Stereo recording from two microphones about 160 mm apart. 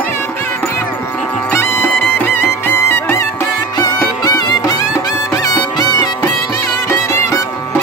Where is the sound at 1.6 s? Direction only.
10° left (ahead or behind).